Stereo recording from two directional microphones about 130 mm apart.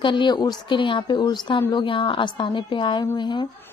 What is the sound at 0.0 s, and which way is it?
Speech, 40° left (ahead or behind).